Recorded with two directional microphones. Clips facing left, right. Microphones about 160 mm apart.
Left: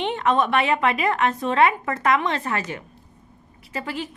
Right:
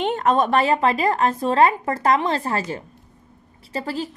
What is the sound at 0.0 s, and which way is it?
A woman's voice, 45° right (ahead or behind).